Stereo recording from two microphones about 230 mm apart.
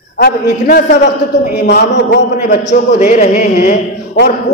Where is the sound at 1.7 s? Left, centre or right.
Left.